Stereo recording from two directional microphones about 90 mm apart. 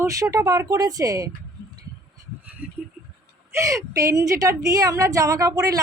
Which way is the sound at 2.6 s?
20° right (ahead or behind).